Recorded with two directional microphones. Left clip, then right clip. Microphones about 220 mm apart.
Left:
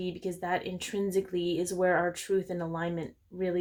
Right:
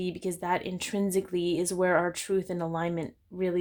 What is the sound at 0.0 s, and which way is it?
Speech, 35° right (ahead or behind).